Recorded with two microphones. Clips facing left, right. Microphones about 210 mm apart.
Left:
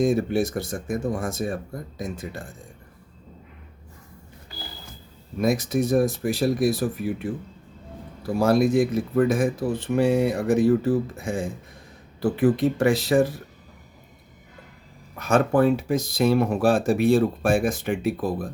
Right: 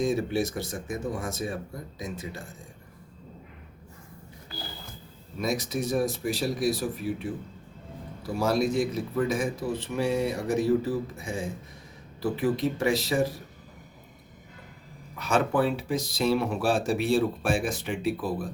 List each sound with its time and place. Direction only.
0.0 s speech: 55° left (ahead or behind)
5.4 s speech: 55° left (ahead or behind)
8.4 s speech: 55° left (ahead or behind)
15.2 s speech: 50° left (ahead or behind)